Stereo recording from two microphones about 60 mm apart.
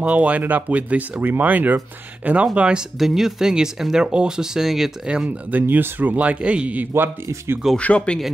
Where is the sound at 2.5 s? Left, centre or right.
Centre.